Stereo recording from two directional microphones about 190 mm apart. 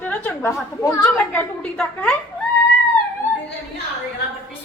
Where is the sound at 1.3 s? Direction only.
5° left (ahead or behind).